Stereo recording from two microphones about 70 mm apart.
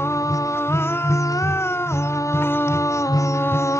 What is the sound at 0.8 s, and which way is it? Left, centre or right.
Music, left.